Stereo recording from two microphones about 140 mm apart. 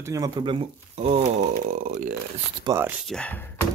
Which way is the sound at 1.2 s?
70° right (ahead or behind).